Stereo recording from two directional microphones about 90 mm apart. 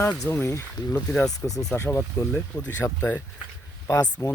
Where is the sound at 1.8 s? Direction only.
30° left (ahead or behind).